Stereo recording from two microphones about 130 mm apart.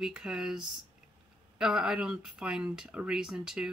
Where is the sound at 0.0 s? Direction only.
5° right (ahead or behind).